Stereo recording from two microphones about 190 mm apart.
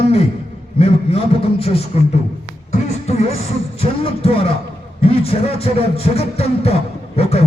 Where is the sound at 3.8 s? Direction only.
30° left (ahead or behind).